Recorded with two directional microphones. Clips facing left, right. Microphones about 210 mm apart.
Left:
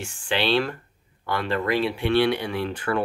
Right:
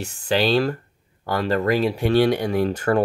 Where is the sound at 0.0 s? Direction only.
40° right (ahead or behind).